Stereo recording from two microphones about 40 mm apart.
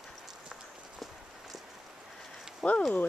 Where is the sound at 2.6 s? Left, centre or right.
Centre.